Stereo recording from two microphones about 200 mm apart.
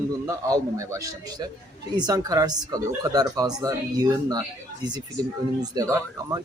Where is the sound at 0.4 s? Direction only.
15° right (ahead or behind).